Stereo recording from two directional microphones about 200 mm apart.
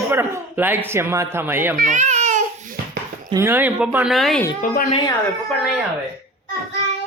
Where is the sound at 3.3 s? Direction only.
10° right (ahead or behind).